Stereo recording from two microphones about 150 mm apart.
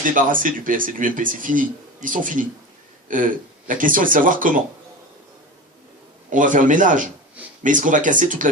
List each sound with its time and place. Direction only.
0.0 s speech: 65° right (ahead or behind)
6.3 s speech: 60° right (ahead or behind)